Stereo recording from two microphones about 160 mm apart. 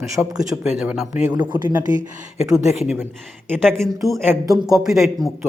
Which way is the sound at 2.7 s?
10° right (ahead or behind).